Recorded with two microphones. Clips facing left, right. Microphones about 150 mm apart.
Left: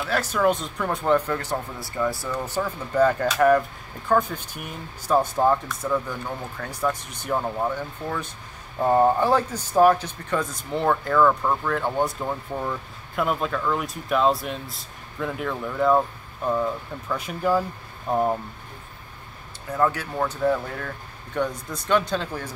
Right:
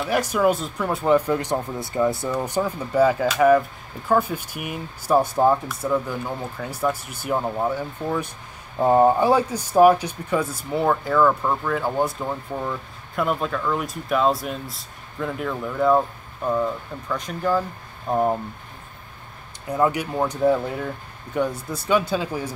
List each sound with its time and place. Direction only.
0.0 s speech: 15° right (ahead or behind)
19.7 s speech: 15° right (ahead or behind)